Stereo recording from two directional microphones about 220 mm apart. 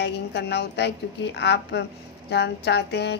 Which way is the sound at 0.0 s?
50° left (ahead or behind).